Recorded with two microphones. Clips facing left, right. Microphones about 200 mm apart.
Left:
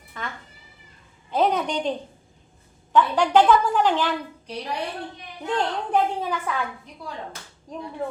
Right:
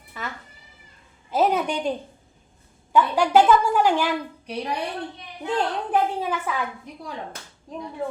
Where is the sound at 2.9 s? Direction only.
10° right (ahead or behind).